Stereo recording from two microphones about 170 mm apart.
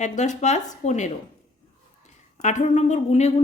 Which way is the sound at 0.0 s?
45° left (ahead or behind).